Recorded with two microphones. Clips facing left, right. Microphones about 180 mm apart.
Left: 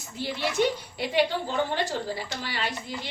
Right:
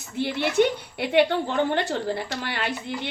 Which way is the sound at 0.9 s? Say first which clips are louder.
Right 7 dB; 60° right (ahead or behind).